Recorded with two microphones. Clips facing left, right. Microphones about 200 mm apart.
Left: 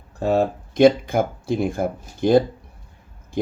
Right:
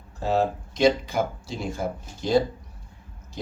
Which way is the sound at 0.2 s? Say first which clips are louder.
Left 4 dB; 55° left (ahead or behind).